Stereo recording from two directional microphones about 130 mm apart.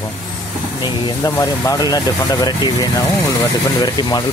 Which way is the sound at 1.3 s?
15° left (ahead or behind).